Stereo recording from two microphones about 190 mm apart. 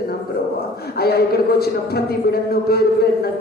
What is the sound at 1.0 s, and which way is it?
A man's voice, 55° left (ahead or behind).